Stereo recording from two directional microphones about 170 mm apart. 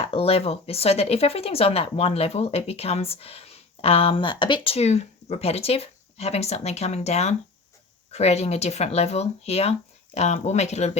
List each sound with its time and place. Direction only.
0.0 s speech: 35° left (ahead or behind)